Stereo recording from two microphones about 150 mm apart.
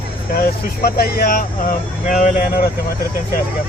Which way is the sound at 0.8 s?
90° left.